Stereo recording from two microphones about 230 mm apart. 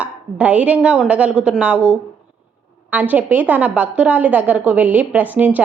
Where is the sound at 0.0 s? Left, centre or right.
Centre.